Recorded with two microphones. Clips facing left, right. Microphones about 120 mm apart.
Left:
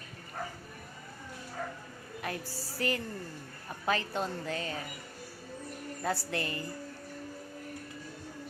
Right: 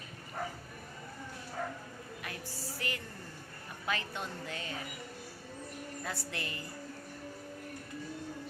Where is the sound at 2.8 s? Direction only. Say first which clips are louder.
Left 10 dB; 40° left (ahead or behind).